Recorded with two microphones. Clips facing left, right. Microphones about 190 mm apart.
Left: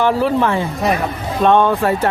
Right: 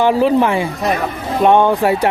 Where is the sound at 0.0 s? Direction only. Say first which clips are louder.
Right 3 dB; 15° right (ahead or behind).